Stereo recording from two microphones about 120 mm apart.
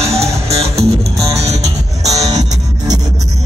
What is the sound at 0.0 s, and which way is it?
Music, 60° right (ahead or behind).